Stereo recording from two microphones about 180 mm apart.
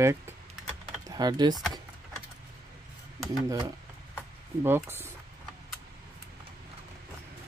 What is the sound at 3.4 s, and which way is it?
Speech, 25° right (ahead or behind).